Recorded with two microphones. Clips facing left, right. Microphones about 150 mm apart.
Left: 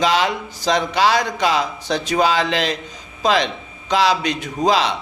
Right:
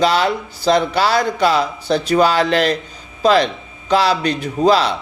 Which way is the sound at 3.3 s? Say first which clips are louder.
Right 4 dB; 35° right (ahead or behind).